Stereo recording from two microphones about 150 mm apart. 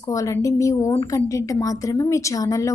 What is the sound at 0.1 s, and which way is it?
A woman's voice, 20° left (ahead or behind).